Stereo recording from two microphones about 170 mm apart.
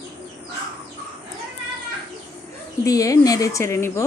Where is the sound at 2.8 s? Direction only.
20° left (ahead or behind).